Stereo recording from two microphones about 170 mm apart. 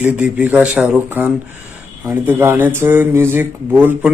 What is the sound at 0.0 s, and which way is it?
Speech, 10° right (ahead or behind).